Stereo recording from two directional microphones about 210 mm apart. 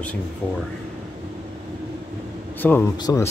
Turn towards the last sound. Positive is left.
turn(degrees=15)  # may be behind; listen again after turning